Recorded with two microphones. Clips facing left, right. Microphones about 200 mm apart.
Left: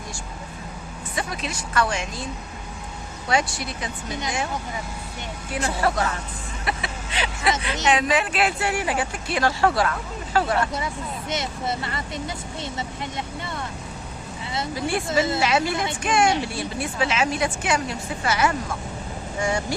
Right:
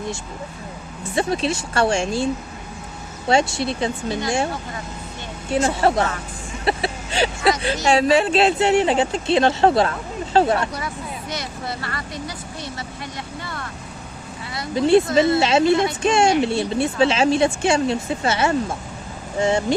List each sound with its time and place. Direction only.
1.1 s speech: 30° right (ahead or behind)
5.5 s speech: 25° right (ahead or behind)
6.7 s vehicle: 30° right (ahead or behind)
7.9 s speech: 30° right (ahead or behind)
10.7 s speech: 25° left (ahead or behind)
14.8 s speech: 25° right (ahead or behind)